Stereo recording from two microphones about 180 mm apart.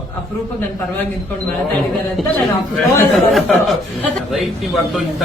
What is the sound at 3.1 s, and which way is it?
Speech, centre (ahead or behind).